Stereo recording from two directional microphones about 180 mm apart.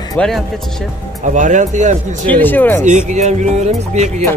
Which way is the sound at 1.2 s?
45° right (ahead or behind).